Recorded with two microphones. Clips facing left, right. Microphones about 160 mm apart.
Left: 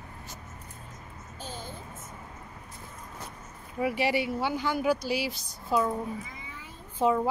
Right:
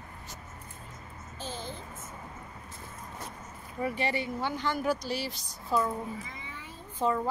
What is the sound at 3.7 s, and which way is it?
Speech, 5° left (ahead or behind).